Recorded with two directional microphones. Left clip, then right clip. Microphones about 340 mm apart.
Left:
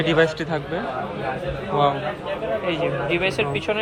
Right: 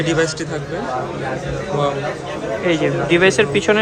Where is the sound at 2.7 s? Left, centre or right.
Right.